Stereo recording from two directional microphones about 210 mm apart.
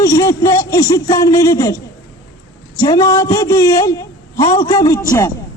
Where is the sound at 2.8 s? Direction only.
20° left (ahead or behind).